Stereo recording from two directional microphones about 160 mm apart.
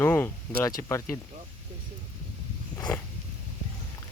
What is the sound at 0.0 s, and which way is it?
Speech, 10° left (ahead or behind).